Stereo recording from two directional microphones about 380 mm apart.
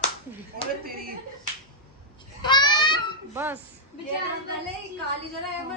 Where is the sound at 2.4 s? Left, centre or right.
Centre.